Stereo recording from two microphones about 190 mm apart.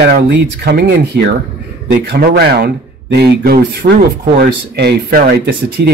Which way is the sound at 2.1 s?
55° right (ahead or behind).